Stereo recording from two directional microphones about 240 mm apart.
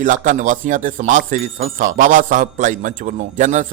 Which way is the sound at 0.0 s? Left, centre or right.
Right.